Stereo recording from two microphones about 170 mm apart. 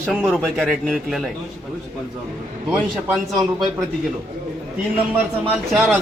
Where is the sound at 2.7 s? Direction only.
Centre (ahead or behind).